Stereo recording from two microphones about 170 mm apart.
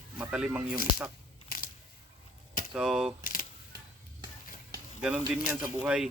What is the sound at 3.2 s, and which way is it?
Camera, 55° left (ahead or behind).